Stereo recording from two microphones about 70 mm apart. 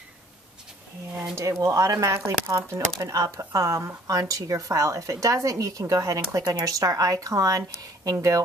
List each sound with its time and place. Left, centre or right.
1.3 s speech: right